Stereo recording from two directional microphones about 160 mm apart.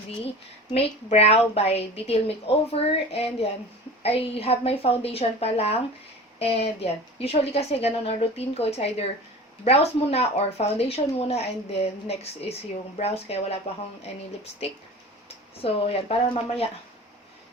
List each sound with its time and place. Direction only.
0.7 s speech: 40° left (ahead or behind)
15.6 s speech: 40° left (ahead or behind)